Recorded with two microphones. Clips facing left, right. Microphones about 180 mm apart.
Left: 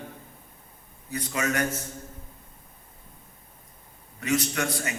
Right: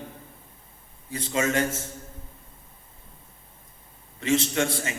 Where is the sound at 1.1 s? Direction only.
25° right (ahead or behind).